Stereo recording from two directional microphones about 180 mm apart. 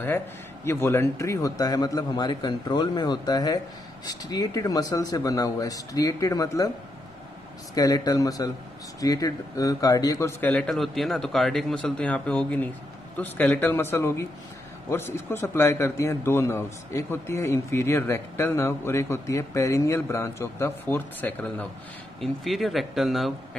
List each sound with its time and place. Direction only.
0.7 s a man's voice: 15° left (ahead or behind)
7.7 s a man's voice: 20° left (ahead or behind); by 23.6 s centre (ahead or behind)